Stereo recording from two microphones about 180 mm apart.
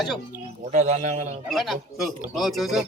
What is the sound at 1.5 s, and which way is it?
Speech, centre (ahead or behind).